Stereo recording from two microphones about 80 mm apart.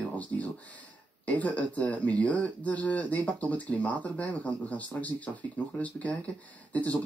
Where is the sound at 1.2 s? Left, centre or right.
Centre.